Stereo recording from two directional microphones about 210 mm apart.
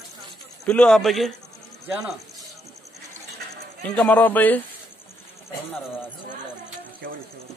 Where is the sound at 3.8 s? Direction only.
5° left (ahead or behind).